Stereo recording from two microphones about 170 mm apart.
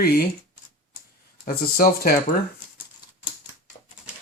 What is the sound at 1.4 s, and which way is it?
Speech, 60° left (ahead or behind).